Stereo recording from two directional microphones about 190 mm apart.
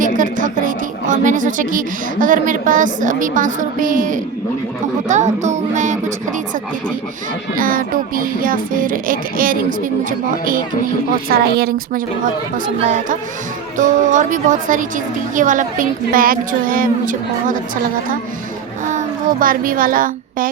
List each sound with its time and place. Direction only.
0.0 s speech: 45° right (ahead or behind)
5.0 s music: 40° right (ahead or behind)
7.5 s a woman's voice: 45° right (ahead or behind)
18.9 s a child's voice: 45° right (ahead or behind)